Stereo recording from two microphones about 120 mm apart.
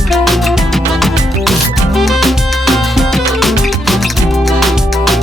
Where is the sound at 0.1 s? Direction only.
Centre (ahead or behind).